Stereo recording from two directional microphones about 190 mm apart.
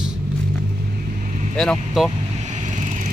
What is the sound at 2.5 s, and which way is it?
Vehicle, 40° right (ahead or behind).